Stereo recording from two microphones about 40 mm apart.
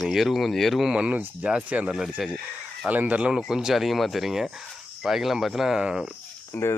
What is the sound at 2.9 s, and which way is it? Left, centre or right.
Speech, right.